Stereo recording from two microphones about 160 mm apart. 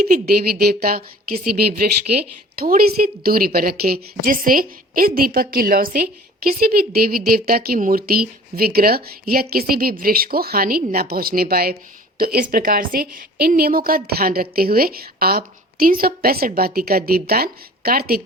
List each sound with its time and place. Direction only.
0.0 s a woman's voice: 70° right (ahead or behind)
2.6 s a woman's voice: 65° right (ahead or behind)